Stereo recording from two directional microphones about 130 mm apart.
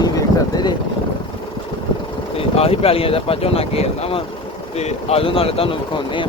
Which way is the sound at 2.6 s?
50° left (ahead or behind).